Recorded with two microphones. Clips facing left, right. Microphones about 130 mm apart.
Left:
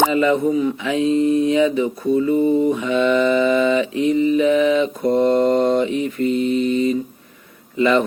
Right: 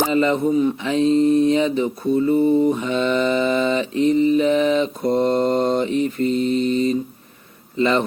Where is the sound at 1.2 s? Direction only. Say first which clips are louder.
Left 1 dB; 30° right (ahead or behind).